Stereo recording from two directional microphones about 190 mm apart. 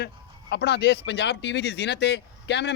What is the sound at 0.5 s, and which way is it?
Speech, 60° left (ahead or behind).